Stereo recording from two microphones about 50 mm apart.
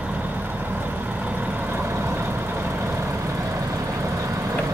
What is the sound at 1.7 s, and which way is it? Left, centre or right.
Vehicle, right.